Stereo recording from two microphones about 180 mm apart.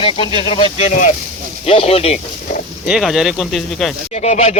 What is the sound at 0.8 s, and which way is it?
Speech, 40° left (ahead or behind).